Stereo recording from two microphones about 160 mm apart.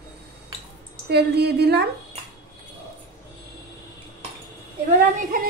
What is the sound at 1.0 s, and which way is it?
Speech, 90° right.